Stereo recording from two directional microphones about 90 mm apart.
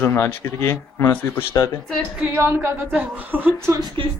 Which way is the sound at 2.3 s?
25° right (ahead or behind).